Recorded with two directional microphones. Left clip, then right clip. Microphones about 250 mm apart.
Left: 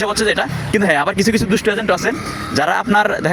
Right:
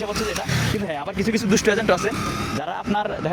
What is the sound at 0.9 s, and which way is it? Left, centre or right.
Speech, left.